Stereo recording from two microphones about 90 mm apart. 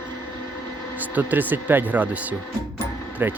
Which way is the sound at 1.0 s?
20° right (ahead or behind).